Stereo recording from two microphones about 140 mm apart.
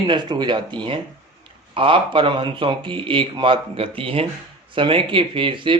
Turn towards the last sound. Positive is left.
turn(degrees=-35)  # may be behind; listen again after turning